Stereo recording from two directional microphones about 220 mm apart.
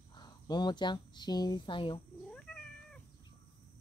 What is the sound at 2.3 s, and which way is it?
Cat, 5° left (ahead or behind).